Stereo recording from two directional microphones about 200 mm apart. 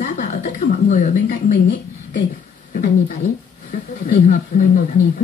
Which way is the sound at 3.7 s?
45° left (ahead or behind).